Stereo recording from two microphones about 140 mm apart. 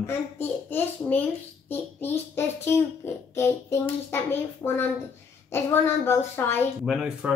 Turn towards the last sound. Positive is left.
turn(degrees=-5)  # may be behind; listen again after turning